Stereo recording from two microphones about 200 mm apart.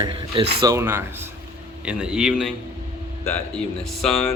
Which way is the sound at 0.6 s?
15° right (ahead or behind).